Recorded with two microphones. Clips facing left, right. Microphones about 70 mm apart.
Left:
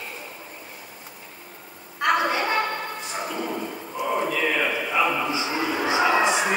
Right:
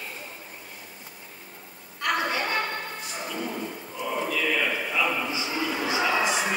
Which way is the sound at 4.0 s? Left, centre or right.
Left.